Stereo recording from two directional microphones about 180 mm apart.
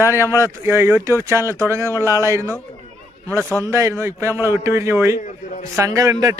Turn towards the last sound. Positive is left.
turn(degrees=-20)  # may be behind; listen again after turning